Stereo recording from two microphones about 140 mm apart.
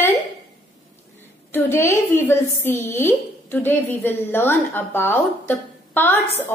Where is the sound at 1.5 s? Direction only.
20° left (ahead or behind).